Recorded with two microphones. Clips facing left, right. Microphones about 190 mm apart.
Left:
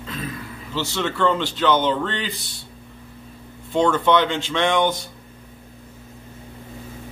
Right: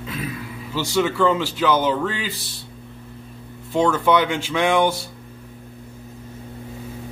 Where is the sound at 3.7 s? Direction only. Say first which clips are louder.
Even; 5° right (ahead or behind).